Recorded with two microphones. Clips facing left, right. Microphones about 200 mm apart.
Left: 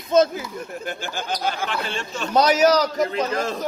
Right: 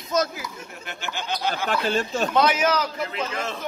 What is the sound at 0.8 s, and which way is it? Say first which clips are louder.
Speech: left 4 dB; 45° left (ahead or behind).